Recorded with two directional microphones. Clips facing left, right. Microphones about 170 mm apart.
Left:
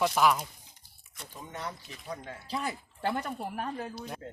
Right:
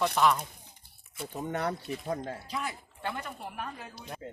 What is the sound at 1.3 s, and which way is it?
Speech, 65° right (ahead or behind).